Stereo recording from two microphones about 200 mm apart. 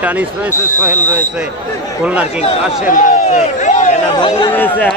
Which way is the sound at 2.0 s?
5° right (ahead or behind).